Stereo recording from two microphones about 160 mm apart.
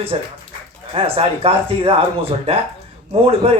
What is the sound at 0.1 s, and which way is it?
Speech, 35° right (ahead or behind).